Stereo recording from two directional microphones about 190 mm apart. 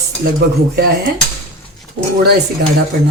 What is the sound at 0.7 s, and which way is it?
Speech, 55° right (ahead or behind).